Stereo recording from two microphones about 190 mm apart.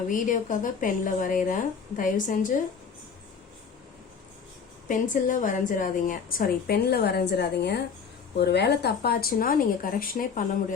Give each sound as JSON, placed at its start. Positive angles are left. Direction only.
{"t": 0.1, "sound": "a woman's voice", "side_deg": 45}
{"t": 4.9, "sound": "a woman's voice", "side_deg": 45}